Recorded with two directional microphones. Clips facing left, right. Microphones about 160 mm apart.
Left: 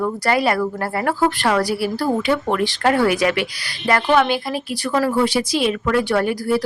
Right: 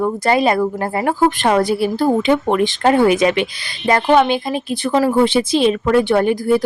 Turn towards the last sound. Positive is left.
turn(degrees=-20)  # may be behind; listen again after turning